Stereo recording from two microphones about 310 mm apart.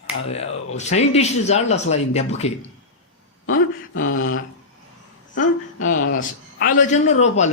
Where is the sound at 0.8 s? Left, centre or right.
Left.